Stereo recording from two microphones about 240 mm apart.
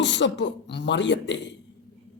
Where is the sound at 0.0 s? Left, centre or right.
Left.